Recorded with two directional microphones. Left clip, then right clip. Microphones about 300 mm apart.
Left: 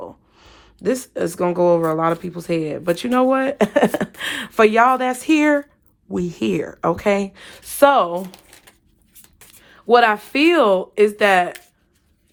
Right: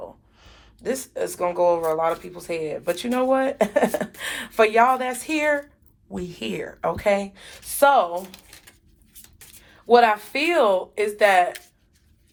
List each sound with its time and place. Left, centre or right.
0.3 s speech: left
9.6 s speech: left